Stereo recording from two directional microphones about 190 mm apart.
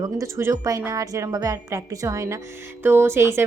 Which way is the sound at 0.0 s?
15° right (ahead or behind).